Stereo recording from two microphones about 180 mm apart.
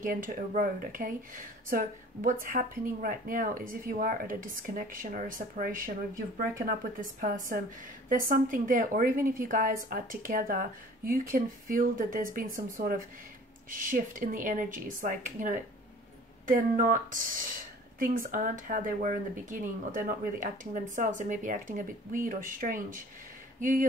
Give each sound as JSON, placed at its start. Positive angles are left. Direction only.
{"t": 0.0, "sound": "speech", "side_deg": -50}